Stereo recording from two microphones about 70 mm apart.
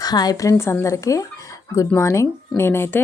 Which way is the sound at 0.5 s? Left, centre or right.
Left.